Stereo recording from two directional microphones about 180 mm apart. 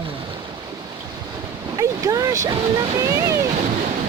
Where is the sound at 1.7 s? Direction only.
15° right (ahead or behind).